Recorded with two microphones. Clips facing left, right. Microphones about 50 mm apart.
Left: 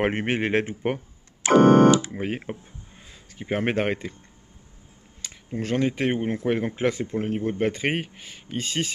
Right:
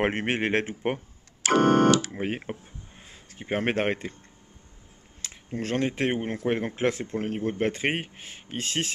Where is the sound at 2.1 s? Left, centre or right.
Centre.